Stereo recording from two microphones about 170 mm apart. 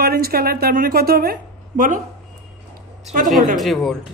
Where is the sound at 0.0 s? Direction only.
60° right (ahead or behind).